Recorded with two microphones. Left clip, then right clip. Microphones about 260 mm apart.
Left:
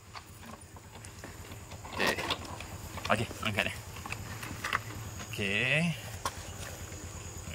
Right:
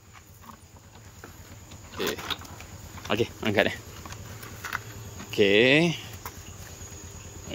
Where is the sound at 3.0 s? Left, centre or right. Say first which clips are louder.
Right 4 dB; centre.